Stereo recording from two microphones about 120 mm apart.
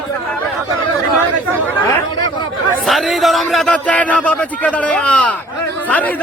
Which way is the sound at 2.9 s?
Centre (ahead or behind).